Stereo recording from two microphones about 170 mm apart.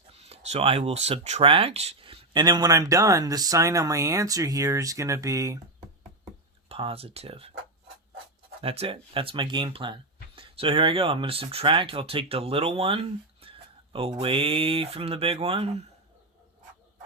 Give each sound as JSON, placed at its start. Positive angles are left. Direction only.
{"t": 0.1, "sound": "speech", "side_deg": -35}
{"t": 6.7, "sound": "speech", "side_deg": -35}
{"t": 8.6, "sound": "speech", "side_deg": -35}